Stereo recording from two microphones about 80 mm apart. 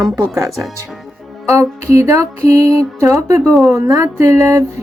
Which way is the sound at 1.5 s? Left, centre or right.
Right.